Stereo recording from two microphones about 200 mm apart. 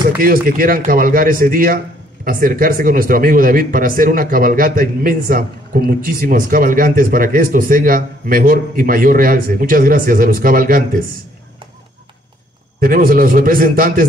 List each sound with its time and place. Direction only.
0.2 s speech: 45° right (ahead or behind)
12.8 s speech: 45° right (ahead or behind)